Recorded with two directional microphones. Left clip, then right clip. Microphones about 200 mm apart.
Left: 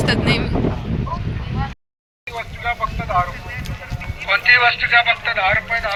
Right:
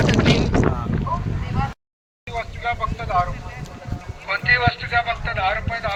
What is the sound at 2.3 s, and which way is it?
Vehicle, 40° left (ahead or behind).